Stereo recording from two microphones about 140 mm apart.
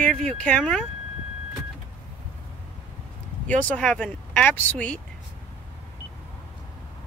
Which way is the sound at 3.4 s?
10° left (ahead or behind).